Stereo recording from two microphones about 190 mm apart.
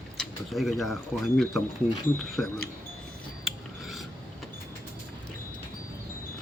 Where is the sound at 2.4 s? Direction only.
Centre (ahead or behind).